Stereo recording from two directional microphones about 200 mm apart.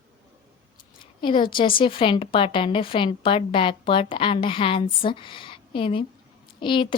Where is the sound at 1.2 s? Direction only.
25° left (ahead or behind).